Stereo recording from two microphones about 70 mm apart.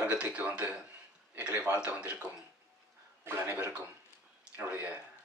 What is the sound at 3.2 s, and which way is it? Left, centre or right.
Speech, right.